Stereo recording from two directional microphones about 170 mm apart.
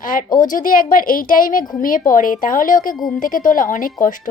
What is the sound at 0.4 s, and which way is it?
A woman's voice, 50° left (ahead or behind).